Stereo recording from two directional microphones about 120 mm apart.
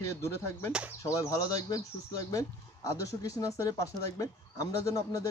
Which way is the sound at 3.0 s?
30° left (ahead or behind).